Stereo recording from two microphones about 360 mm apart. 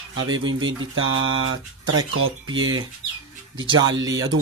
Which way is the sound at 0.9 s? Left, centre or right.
Right.